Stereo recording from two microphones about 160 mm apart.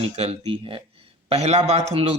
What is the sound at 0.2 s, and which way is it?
A man's voice, 40° right (ahead or behind).